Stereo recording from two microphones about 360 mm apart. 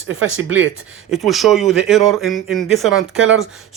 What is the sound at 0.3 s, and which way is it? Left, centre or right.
Speech, right.